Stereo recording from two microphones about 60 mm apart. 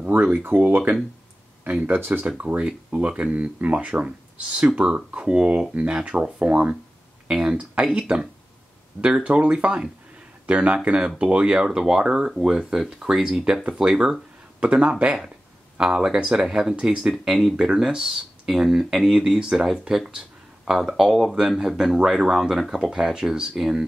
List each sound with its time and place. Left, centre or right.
0.2 s speech: right
9.0 s speech: centre